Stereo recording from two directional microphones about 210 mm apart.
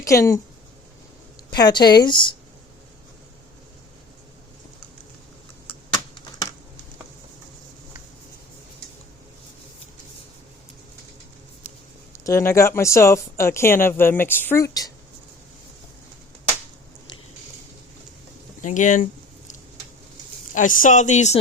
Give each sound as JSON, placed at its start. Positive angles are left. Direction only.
{"t": 0.0, "sound": "speech", "side_deg": 15}
{"t": 1.5, "sound": "a woman's voice", "side_deg": 20}
{"t": 12.1, "sound": "speech", "side_deg": 15}
{"t": 18.6, "sound": "speech", "side_deg": 35}
{"t": 20.5, "sound": "speech", "side_deg": 40}